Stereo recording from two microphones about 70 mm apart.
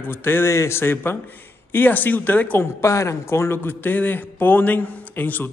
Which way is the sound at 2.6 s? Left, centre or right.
Left.